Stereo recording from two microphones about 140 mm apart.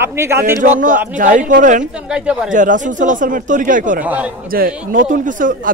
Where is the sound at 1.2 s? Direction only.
65° right (ahead or behind).